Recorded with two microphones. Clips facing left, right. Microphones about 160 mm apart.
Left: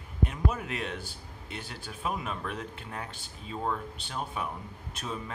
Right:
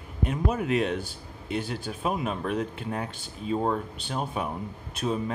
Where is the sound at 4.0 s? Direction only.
20° right (ahead or behind).